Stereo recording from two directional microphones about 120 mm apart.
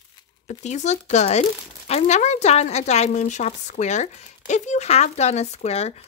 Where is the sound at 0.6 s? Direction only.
75° left (ahead or behind).